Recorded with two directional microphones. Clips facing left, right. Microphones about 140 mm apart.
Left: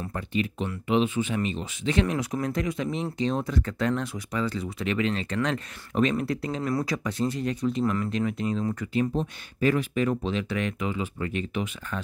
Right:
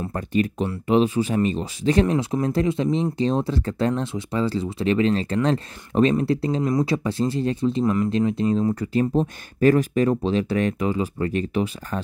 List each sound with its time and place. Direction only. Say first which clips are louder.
0.1 s speech: right 6 dB; 45° right (ahead or behind)